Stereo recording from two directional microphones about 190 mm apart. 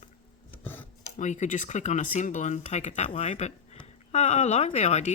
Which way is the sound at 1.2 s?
40° left (ahead or behind).